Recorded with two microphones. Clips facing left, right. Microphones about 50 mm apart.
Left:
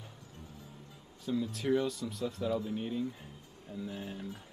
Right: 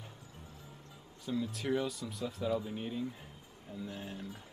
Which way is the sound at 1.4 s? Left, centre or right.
Centre.